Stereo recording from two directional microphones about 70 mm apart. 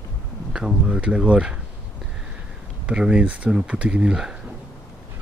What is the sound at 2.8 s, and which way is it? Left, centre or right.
Speech, centre.